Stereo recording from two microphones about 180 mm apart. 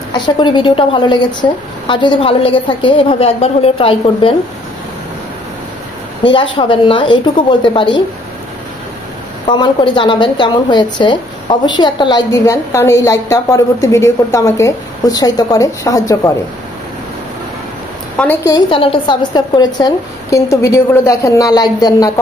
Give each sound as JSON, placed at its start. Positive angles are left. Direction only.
{"t": 0.1, "sound": "a woman's voice", "side_deg": 25}
{"t": 6.2, "sound": "a woman's voice", "side_deg": 30}
{"t": 9.5, "sound": "a woman's voice", "side_deg": 25}
{"t": 18.1, "sound": "a woman's voice", "side_deg": 10}
{"t": 18.7, "sound": "a woman's voice", "side_deg": 30}